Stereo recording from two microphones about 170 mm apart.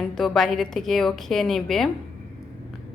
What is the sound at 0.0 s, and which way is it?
A woman's voice, 5° left (ahead or behind).